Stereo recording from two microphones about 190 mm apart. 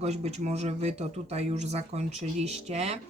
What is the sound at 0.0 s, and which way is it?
Speech, 35° right (ahead or behind).